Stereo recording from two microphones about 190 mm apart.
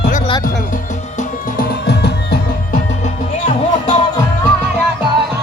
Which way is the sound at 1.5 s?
60° left (ahead or behind).